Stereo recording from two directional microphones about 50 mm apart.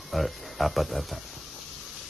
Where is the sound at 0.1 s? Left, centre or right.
Centre.